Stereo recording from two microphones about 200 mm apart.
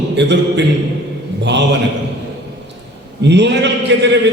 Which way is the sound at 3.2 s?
60° right (ahead or behind).